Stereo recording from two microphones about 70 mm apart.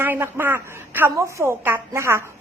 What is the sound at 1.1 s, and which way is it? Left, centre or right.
A woman's voice, right.